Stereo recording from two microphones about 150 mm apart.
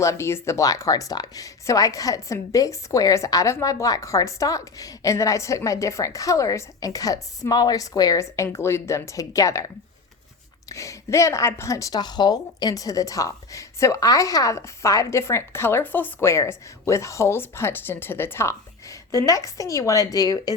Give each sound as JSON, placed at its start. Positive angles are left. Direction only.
{"t": 0.0, "sound": "a woman's voice", "side_deg": 20}